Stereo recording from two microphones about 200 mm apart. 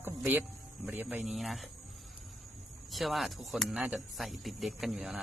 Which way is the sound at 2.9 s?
Centre (ahead or behind).